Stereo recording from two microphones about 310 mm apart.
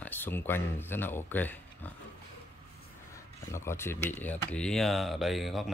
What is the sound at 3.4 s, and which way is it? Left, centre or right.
Speech, centre.